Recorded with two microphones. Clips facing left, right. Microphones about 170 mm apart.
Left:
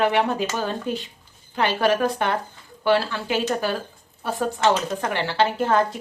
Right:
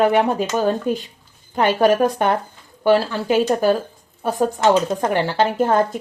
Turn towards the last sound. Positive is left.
turn(degrees=-45)  # may be behind; listen again after turning